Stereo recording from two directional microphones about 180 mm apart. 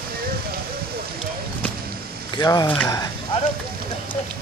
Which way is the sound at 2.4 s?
20° left (ahead or behind).